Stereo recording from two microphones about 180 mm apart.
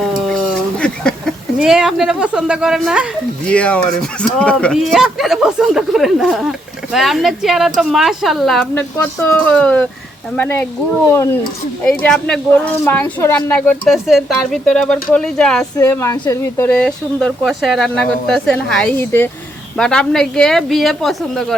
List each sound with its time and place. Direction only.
0.8 s a woman's voice: 5° left (ahead or behind)
11.8 s speech: 5° left (ahead or behind)
15.8 s a woman's voice: 15° left (ahead or behind)